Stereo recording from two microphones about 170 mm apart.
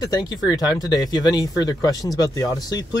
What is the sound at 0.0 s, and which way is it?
Speech, 25° left (ahead or behind).